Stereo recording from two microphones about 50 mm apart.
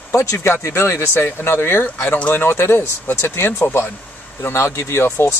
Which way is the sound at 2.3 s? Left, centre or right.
Left.